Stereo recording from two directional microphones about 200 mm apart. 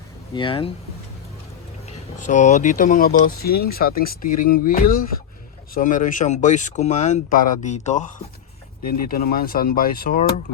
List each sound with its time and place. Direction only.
0.3 s speech: 25° left (ahead or behind)
1.9 s speech: 40° left (ahead or behind)